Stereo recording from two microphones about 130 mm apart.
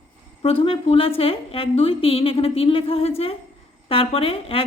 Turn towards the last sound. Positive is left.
turn(degrees=45)  # may be behind; listen again after turning